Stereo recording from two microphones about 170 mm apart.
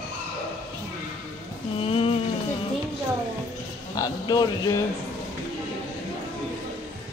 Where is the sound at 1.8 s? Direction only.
35° left (ahead or behind).